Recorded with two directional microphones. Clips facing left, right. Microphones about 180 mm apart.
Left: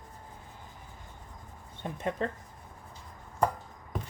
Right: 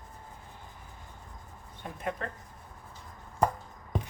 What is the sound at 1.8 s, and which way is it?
Speech, 30° left (ahead or behind).